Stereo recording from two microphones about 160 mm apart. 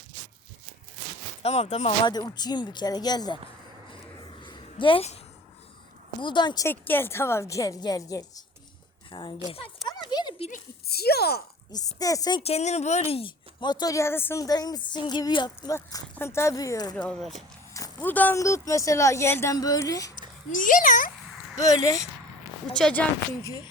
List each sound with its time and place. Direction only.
1.4 s speech: 40° left (ahead or behind)
2.0 s speech: 25° left (ahead or behind)
4.4 s a sound: 30° left (ahead or behind)
6.2 s speech: 30° left (ahead or behind)
6.7 s a woman's voice: 15° left (ahead or behind); by 9.3 s 30° left (ahead or behind)
10.1 s a sound: 25° left (ahead or behind)
10.8 s speech: 80° left
11.9 s speech: 20° left (ahead or behind)
12.4 s speech: 40° left (ahead or behind); by 16.9 s 25° left (ahead or behind)
16.9 s speech: 5° left (ahead or behind)
17.7 s speech: 15° left (ahead or behind)
20.5 s speech: 55° left (ahead or behind)
22.7 s a woman's voice: 5° left (ahead or behind)